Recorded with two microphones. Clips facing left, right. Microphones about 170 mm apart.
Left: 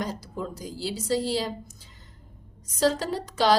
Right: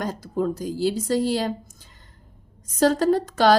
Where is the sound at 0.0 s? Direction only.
50° right (ahead or behind).